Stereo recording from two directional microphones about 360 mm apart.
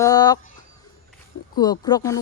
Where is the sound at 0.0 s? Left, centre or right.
Centre.